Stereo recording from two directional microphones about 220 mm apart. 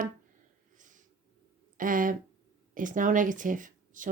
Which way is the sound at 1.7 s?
40° right (ahead or behind).